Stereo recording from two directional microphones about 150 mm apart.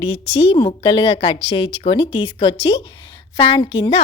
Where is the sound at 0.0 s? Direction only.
40° left (ahead or behind).